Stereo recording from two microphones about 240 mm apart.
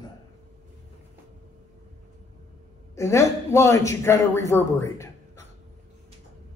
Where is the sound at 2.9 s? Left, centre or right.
Centre.